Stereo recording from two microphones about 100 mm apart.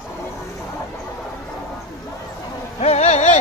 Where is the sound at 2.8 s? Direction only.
90° left.